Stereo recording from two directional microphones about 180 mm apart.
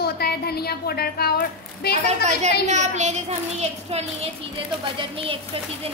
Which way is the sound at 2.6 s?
40° right (ahead or behind).